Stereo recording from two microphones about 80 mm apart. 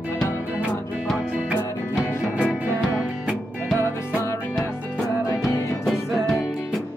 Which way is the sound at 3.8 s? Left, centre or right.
Left.